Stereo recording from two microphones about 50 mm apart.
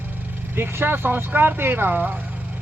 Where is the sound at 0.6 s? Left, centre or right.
Right.